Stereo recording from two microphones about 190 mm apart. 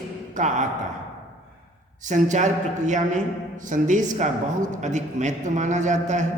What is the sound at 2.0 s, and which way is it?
Speech, 40° right (ahead or behind).